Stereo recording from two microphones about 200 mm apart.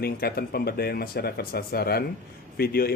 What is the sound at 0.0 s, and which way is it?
A man's voice, 50° left (ahead or behind).